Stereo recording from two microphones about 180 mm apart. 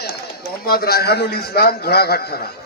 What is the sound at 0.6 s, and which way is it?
A man's voice, 55° left (ahead or behind).